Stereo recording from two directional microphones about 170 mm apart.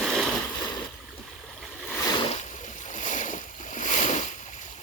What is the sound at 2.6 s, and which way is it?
Boat, 45° left (ahead or behind).